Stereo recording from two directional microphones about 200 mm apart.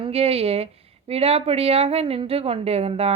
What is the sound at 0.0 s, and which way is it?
Speech, 30° right (ahead or behind).